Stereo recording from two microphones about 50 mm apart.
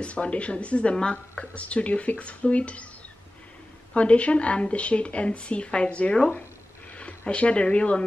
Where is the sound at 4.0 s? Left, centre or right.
Left.